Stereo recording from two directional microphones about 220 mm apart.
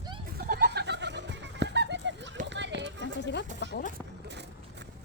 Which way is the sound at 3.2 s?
50° left (ahead or behind).